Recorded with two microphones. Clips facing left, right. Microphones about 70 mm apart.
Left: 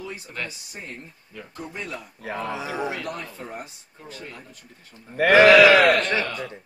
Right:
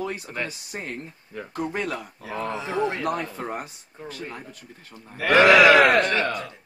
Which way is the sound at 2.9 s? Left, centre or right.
Right.